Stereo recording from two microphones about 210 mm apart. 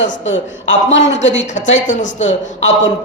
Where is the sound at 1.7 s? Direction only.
35° left (ahead or behind).